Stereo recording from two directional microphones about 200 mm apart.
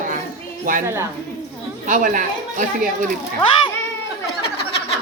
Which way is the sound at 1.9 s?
40° right (ahead or behind).